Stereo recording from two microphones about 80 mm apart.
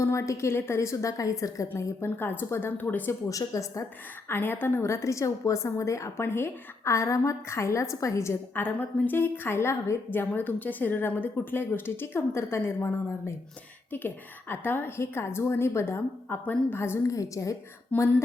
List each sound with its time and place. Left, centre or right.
0.0 s a woman's voice: left
3.1 s a woman's voice: left
4.3 s a woman's voice: left
8.5 s a woman's voice: left
17.9 s a woman's voice: left